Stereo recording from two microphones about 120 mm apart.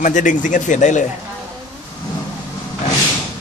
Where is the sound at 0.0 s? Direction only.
90° left.